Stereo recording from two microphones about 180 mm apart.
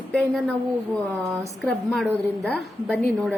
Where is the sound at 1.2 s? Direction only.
15° right (ahead or behind).